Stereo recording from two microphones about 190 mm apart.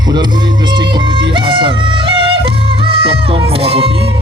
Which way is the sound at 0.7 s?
25° right (ahead or behind).